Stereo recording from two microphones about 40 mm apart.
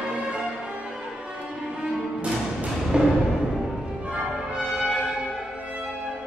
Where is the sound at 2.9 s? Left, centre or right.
Centre.